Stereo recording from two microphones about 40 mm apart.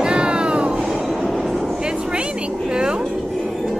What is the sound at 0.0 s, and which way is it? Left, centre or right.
Cat, right.